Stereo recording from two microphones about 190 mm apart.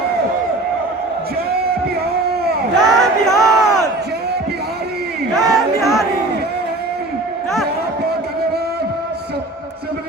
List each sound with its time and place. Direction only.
2.7 s crowd: centre (ahead or behind)
3.3 s crowd: 20° left (ahead or behind)
5.4 s a sound: centre (ahead or behind)